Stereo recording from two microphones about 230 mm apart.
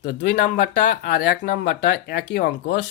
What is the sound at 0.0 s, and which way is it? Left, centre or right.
Speech, left.